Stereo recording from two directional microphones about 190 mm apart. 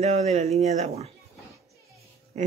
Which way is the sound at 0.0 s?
35° right (ahead or behind).